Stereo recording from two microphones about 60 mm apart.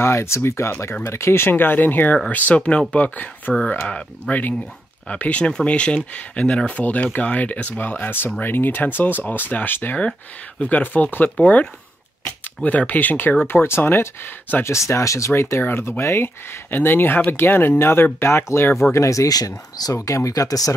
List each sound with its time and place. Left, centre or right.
0.0 s speech: left
11.3 s speech: centre
13.5 s speech: left
14.6 s speech: left
18.9 s speech: left